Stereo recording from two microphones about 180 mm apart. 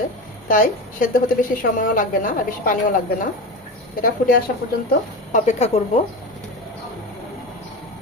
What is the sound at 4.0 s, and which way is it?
Speech, 50° left (ahead or behind).